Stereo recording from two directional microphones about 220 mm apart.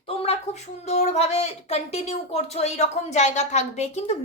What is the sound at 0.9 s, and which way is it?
A woman's voice, 30° left (ahead or behind).